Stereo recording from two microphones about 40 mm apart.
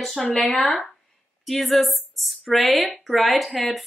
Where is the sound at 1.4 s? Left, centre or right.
Centre.